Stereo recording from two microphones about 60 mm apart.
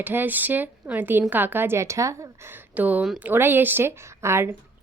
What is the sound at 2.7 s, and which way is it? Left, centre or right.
A woman's voice, right.